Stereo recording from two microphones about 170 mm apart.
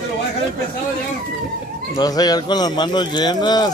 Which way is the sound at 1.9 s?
20° left (ahead or behind).